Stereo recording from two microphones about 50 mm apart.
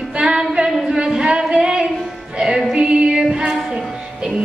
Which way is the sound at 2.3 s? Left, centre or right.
Centre.